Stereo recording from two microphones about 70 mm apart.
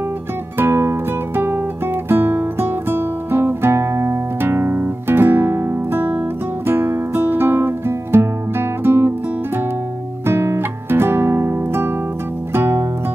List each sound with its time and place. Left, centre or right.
0.6 s music: right
2.0 s guitar: right
10.2 s music: right